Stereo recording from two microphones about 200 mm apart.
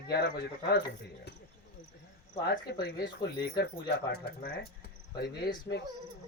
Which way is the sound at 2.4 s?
55° left (ahead or behind).